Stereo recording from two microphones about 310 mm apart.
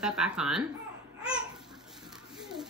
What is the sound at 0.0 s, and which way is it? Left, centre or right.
Speech, centre.